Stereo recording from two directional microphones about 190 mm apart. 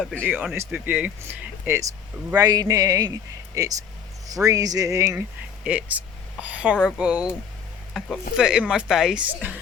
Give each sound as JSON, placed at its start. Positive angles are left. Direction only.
{"t": 0.0, "sound": "speech", "side_deg": 5}
{"t": 0.3, "sound": "a man's voice", "side_deg": -10}